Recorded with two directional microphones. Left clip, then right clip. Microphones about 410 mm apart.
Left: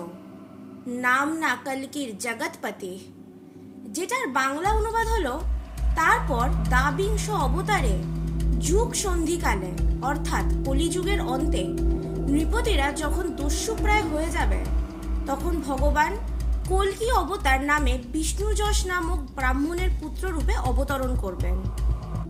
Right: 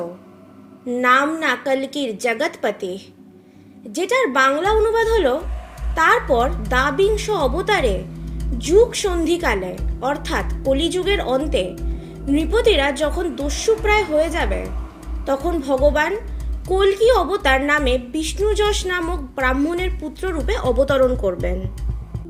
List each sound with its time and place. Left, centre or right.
0.9 s a woman's voice: left